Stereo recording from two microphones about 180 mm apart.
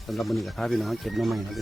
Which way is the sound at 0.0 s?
Centre (ahead or behind).